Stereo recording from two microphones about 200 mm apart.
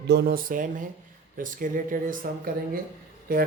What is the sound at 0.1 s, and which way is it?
Speech, 50° right (ahead or behind).